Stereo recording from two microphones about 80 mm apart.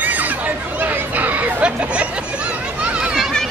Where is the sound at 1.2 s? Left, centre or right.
Centre.